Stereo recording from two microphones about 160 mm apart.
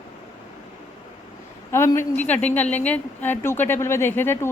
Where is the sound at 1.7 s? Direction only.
15° left (ahead or behind).